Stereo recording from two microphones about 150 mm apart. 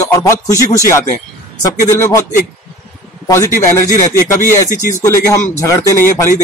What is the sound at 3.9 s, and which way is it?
Speech, 60° left (ahead or behind).